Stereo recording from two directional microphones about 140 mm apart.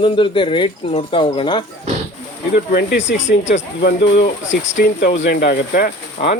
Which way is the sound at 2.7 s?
60° left (ahead or behind).